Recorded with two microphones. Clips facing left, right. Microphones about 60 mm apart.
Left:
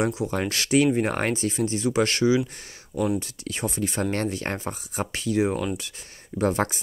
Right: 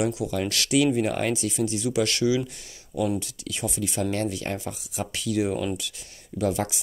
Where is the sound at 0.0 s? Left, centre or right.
Left.